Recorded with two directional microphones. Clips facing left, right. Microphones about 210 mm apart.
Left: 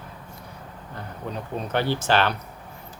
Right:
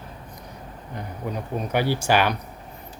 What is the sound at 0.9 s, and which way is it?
Speech, 10° right (ahead or behind).